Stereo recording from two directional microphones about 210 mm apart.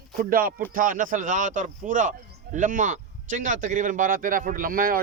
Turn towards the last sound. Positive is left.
turn(degrees=-40)  # may be behind; listen again after turning